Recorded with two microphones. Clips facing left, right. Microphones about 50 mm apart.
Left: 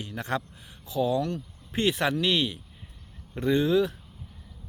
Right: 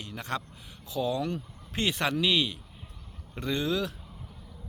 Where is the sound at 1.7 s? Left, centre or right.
Centre.